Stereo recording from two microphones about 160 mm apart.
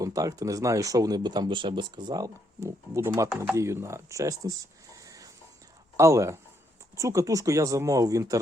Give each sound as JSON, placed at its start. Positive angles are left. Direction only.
{"t": 0.0, "sound": "speech", "side_deg": -20}
{"t": 4.9, "sound": "a sound", "side_deg": -20}
{"t": 6.0, "sound": "speech", "side_deg": -20}